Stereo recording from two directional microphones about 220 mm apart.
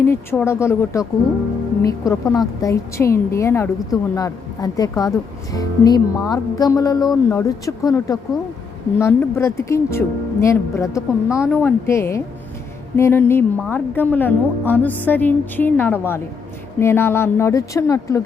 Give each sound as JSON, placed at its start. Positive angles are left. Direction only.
{"t": 0.0, "sound": "a woman's voice", "side_deg": 10}